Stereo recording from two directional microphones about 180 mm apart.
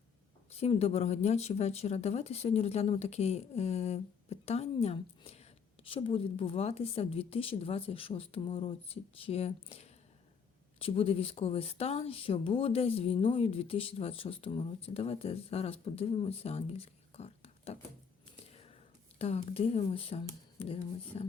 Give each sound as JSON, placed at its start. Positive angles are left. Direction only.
{"t": 0.6, "sound": "a woman's voice", "side_deg": 35}
{"t": 18.4, "sound": "a sound", "side_deg": 35}
{"t": 19.2, "sound": "a woman's voice", "side_deg": 35}